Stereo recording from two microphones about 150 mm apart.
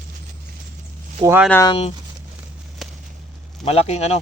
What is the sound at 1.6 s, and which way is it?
Speech, 35° left (ahead or behind).